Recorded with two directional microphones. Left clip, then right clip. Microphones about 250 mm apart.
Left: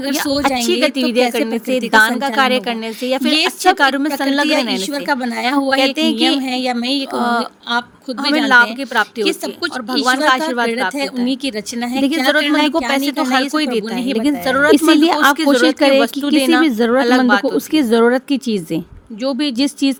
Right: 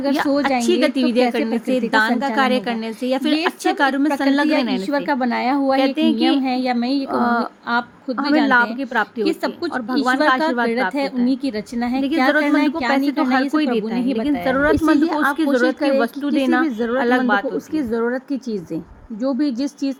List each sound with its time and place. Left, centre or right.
0.0 s speech: left